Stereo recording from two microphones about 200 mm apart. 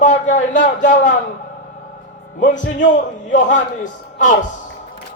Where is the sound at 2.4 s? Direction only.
40° left (ahead or behind).